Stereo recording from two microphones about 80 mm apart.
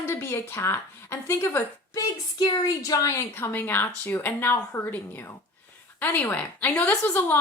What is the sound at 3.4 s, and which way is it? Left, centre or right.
A woman's voice, left.